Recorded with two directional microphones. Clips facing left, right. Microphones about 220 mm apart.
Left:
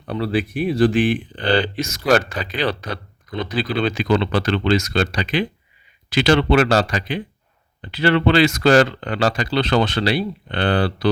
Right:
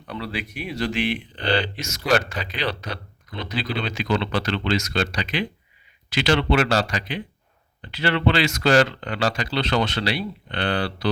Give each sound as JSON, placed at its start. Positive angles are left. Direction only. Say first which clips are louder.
{"t": 0.1, "sound": "speech", "louder": "left 9 dB", "side_deg": 30}
{"t": 0.9, "sound": "speech", "louder": "left 7 dB", "side_deg": 50}